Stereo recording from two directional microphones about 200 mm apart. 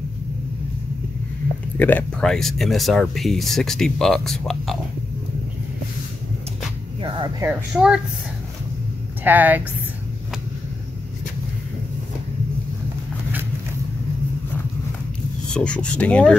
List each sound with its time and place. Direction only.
1.8 s speech: 10° left (ahead or behind)
7.0 s music: 25° right (ahead or behind)
7.4 s speech: 5° right (ahead or behind)
9.2 s speech: 10° right (ahead or behind)
15.5 s speech: 5° left (ahead or behind)